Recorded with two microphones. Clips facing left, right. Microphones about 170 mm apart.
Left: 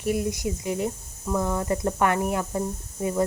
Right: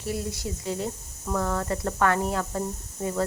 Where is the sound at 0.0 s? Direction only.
15° left (ahead or behind).